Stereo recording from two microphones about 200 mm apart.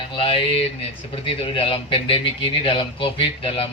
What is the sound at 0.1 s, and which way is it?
A man's voice, 25° left (ahead or behind).